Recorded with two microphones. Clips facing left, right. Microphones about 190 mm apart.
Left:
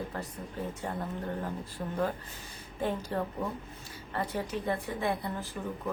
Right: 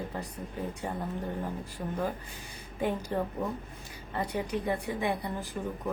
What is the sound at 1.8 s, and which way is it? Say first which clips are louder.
A woman's voice: left 1 dB; 10° right (ahead or behind).